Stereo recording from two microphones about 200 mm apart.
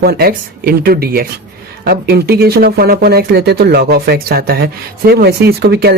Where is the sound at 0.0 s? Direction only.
50° right (ahead or behind).